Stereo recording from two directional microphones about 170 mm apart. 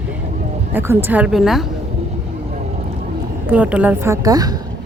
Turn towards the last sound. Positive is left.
turn(degrees=-20)  # may be behind; listen again after turning